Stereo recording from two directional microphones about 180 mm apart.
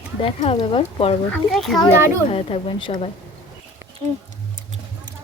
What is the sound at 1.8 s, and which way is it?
A woman's voice, 30° left (ahead or behind).